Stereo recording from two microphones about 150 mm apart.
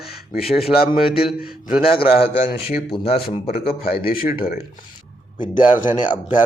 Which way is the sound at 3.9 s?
80° left.